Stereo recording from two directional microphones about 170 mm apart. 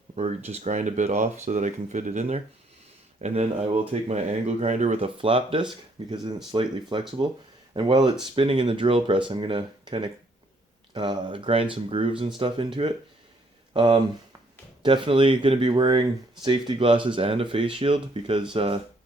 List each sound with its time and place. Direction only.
0.2 s speech: 40° right (ahead or behind)